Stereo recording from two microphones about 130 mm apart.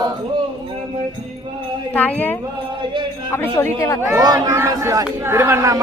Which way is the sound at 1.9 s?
15° left (ahead or behind).